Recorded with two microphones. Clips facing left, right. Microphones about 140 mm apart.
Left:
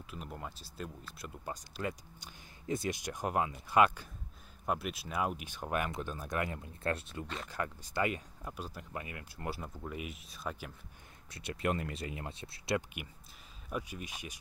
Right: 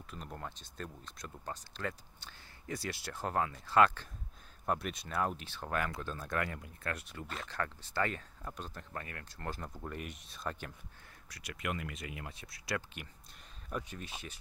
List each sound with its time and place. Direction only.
0.0 s speech: 5° left (ahead or behind); by 7.2 s 25° left (ahead or behind)
7.4 s speech: 10° left (ahead or behind)
11.2 s speech: 25° left (ahead or behind)
13.7 s speech: 10° left (ahead or behind)